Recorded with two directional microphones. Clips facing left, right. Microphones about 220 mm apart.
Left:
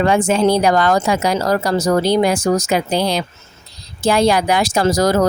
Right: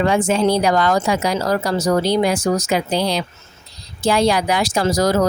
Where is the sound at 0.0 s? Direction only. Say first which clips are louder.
Left 2 dB; 50° left (ahead or behind).